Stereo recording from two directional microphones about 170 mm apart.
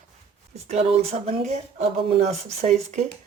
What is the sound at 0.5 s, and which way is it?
Speech, 40° right (ahead or behind).